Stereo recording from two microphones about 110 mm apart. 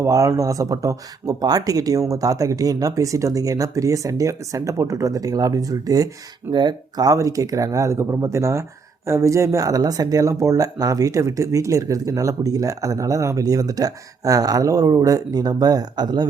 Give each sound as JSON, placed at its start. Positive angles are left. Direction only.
{"t": 0.0, "sound": "speech", "side_deg": -30}